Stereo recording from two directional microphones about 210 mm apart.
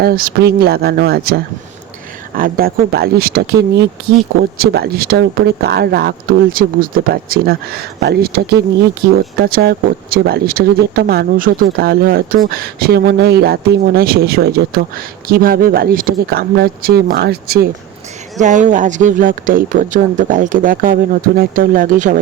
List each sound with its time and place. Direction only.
0.0 s speech: 45° right (ahead or behind)
18.3 s speech: 35° right (ahead or behind)